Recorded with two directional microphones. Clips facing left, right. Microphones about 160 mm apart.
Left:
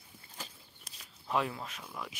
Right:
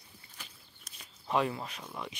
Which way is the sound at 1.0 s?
Centre (ahead or behind).